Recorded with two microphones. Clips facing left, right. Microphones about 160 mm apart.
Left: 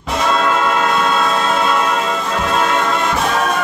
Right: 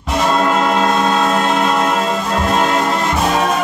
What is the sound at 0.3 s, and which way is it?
Music, 20° right (ahead or behind).